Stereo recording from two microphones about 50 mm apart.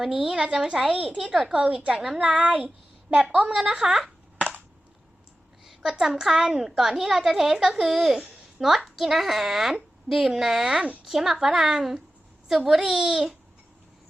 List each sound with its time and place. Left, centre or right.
0.0 s a woman's voice: centre
1.5 s a woman's voice: right
2.1 s a woman's voice: right
5.6 s a woman's voice: centre